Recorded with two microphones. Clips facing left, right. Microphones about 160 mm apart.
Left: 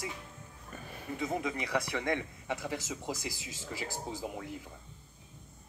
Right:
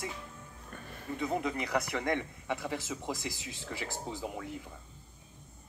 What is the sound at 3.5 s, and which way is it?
Speech, 40° left (ahead or behind).